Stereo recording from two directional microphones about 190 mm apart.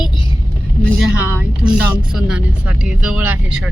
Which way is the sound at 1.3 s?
10° right (ahead or behind).